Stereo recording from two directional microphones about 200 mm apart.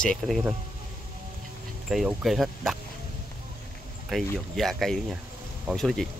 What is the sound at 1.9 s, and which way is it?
Speech, centre (ahead or behind).